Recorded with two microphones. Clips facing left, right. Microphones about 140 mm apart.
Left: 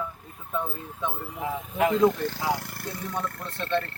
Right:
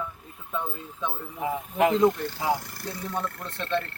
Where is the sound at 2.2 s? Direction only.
65° left (ahead or behind).